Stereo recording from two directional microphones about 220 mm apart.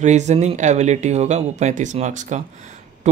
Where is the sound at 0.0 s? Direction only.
30° right (ahead or behind).